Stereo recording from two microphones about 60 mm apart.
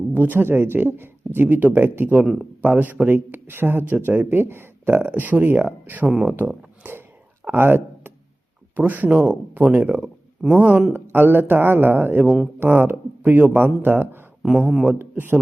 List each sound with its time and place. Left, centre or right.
0.1 s speech: right
2.2 s speech: centre
2.6 s speech: right
6.1 s speech: centre
7.4 s a sound: right
8.7 s speech: right
10.9 s speech: right
12.2 s speech: centre
12.5 s speech: right
14.4 s speech: centre
14.8 s speech: right